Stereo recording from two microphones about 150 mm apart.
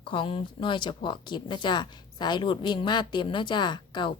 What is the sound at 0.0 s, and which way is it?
Speech, 35° left (ahead or behind).